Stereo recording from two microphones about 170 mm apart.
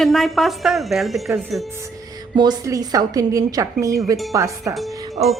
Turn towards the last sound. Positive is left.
turn(degrees=-35)  # may be behind; listen again after turning